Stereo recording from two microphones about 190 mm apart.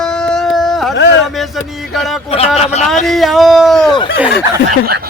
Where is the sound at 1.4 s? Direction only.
Centre (ahead or behind).